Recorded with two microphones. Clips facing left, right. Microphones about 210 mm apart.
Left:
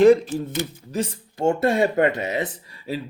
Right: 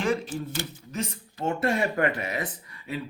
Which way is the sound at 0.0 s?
35° left (ahead or behind).